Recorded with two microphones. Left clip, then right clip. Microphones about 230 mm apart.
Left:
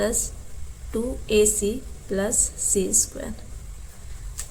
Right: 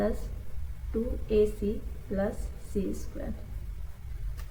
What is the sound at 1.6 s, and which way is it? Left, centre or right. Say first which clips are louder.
Speech: left 7 dB; left.